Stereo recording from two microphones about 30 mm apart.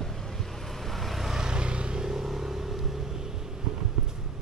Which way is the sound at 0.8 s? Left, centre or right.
Centre.